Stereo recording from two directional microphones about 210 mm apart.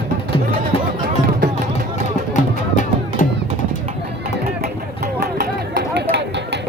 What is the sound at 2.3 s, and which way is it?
Music, 35° left (ahead or behind).